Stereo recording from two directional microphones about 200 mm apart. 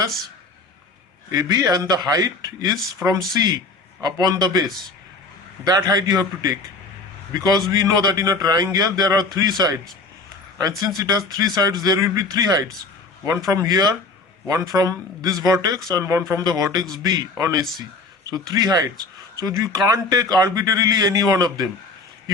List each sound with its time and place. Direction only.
1.3 s a man's voice: 20° right (ahead or behind)
5.6 s a man's voice: 20° right (ahead or behind)